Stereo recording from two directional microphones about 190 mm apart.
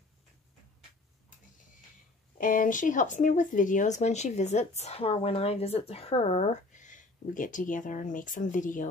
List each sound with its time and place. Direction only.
2.3 s speech: 45° left (ahead or behind)